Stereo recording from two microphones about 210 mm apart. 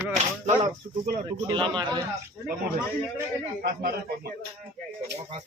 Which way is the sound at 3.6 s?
45° right (ahead or behind).